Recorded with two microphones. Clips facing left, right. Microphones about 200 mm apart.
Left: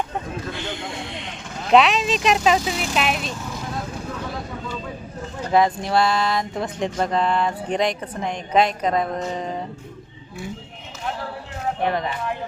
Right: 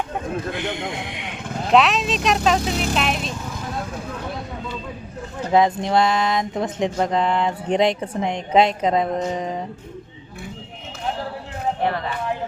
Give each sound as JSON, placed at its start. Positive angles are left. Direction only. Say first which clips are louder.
{"t": 0.5, "sound": "a man's voice", "louder": "right 4 dB", "side_deg": -20}
{"t": 1.7, "sound": "speech", "louder": "left 1 dB", "side_deg": 0}
{"t": 5.5, "sound": "speech", "louder": "right 1 dB", "side_deg": -20}
{"t": 6.9, "sound": "a sound", "louder": "left 1 dB", "side_deg": -15}
{"t": 8.2, "sound": "speech", "louder": "right 2 dB", "side_deg": -25}
{"t": 11.9, "sound": "speech", "louder": "left 1 dB", "side_deg": 20}